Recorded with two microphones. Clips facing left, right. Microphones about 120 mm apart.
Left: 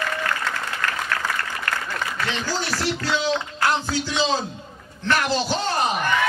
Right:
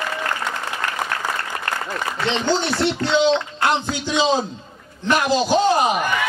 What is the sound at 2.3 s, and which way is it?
A man's voice, 25° right (ahead or behind).